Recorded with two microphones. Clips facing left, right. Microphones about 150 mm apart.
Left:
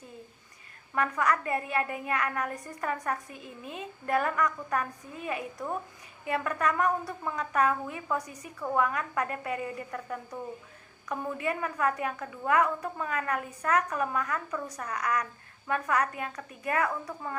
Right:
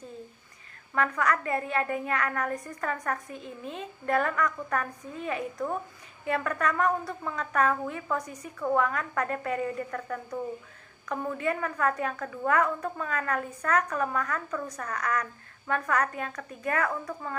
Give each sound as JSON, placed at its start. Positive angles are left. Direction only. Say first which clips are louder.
{"t": 0.9, "sound": "a woman's voice", "louder": "right 1 dB", "side_deg": 20}
{"t": 3.3, "sound": "a woman's voice", "louder": "right 4 dB", "side_deg": -25}
{"t": 3.7, "sound": "a woman's voice", "louder": "right 1 dB", "side_deg": 15}